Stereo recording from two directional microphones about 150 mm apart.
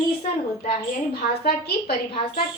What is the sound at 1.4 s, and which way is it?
Speech, 90° left.